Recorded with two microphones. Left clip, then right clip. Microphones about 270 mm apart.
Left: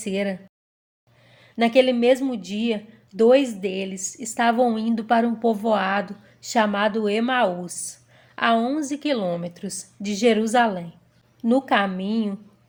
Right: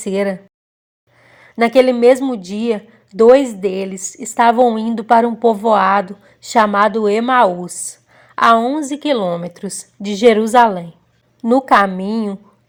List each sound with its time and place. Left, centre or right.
0.0 s a woman's voice: right